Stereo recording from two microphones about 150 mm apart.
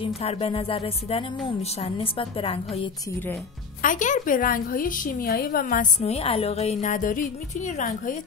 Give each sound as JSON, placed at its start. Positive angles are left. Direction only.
{"t": 0.0, "sound": "speech", "side_deg": 40}
{"t": 3.8, "sound": "a woman's voice", "side_deg": 60}
{"t": 6.0, "sound": "a woman's voice", "side_deg": 40}